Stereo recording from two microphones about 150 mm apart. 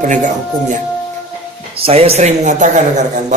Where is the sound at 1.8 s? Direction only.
40° right (ahead or behind).